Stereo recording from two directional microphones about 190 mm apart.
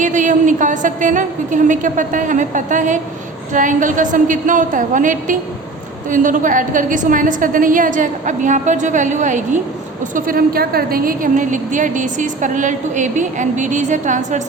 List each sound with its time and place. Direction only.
0.0 s a woman's voice: 40° right (ahead or behind)